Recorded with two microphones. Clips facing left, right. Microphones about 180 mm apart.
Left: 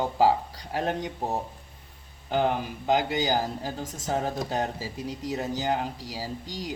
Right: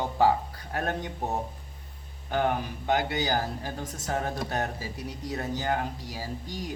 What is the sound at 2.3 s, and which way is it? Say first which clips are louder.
Speech: left 2 dB; 20° left (ahead or behind).